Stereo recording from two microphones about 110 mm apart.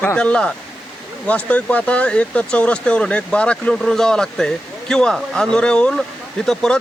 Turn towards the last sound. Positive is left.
turn(degrees=5)  # may be behind; listen again after turning